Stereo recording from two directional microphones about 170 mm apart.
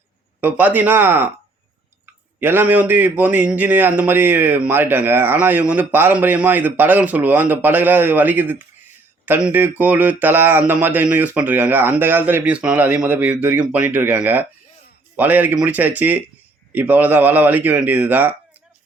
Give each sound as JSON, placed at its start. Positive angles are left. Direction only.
{"t": 0.4, "sound": "a man's voice", "side_deg": -10}
{"t": 2.4, "sound": "a man's voice", "side_deg": -10}